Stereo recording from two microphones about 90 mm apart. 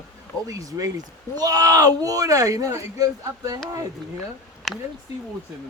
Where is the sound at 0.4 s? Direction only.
40° right (ahead or behind).